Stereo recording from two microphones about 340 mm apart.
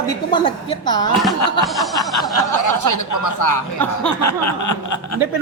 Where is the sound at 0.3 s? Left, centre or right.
Centre.